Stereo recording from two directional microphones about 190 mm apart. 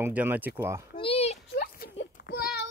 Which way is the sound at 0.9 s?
30° left (ahead or behind).